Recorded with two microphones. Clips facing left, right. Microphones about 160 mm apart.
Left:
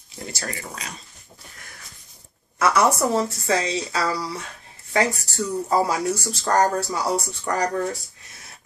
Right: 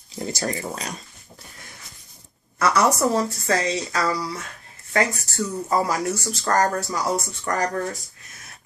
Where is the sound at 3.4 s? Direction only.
10° left (ahead or behind).